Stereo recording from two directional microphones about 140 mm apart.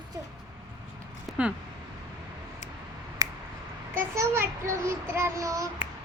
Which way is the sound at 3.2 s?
20° right (ahead or behind).